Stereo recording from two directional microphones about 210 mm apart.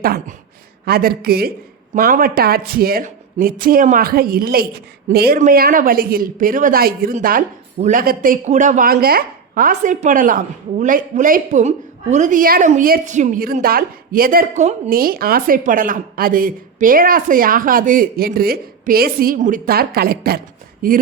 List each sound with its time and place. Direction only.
0.0 s a woman's voice: 45° right (ahead or behind)